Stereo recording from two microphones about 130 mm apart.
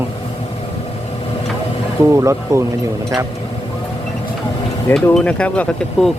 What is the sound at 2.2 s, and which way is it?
Speech, 20° right (ahead or behind).